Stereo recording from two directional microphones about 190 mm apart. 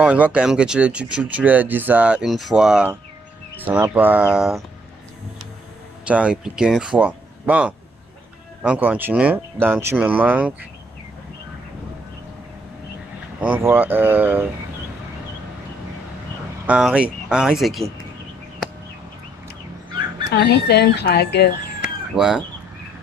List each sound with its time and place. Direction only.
0.0 s speech: 5° right (ahead or behind)
6.1 s speech: 5° right (ahead or behind)
13.4 s speech: 10° right (ahead or behind)
16.6 s speech: 5° right (ahead or behind)
20.3 s speech: 60° left (ahead or behind)
21.8 s chicken: 5° right (ahead or behind)